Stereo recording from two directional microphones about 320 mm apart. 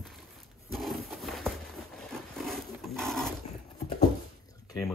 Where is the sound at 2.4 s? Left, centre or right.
Centre.